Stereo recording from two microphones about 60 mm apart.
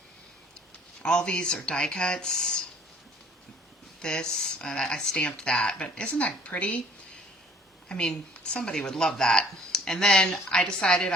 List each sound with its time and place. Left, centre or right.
1.0 s speech: centre
4.0 s a woman's voice: centre
7.9 s speech: centre